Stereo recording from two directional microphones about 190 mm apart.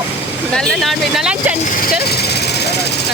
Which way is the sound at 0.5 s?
5° left (ahead or behind).